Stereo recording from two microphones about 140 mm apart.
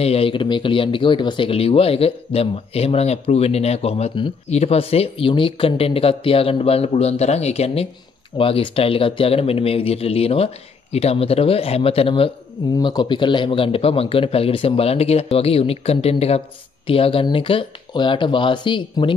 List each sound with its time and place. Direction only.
0.0 s speech: 45° left (ahead or behind)
12.7 s speech: 30° left (ahead or behind)